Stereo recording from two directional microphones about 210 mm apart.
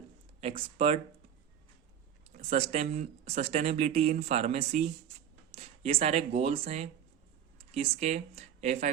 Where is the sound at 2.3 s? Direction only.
30° right (ahead or behind).